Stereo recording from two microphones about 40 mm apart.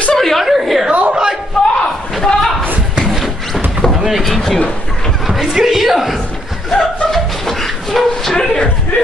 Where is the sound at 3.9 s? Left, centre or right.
Centre.